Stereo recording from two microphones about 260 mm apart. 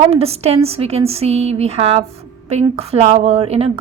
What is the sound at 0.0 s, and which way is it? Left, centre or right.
A woman's voice, right.